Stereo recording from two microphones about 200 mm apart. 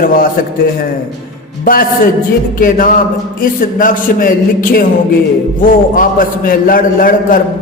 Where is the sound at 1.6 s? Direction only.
45° left (ahead or behind).